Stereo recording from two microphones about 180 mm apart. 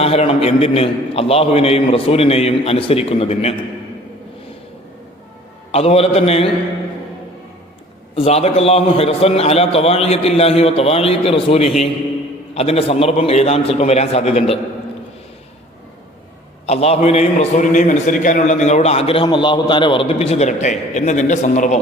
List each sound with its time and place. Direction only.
0.0 s a man's voice: 35° left (ahead or behind)
5.7 s a man's voice: 35° left (ahead or behind)
8.1 s a man's voice: 35° left (ahead or behind)
16.6 s a man's voice: 35° left (ahead or behind)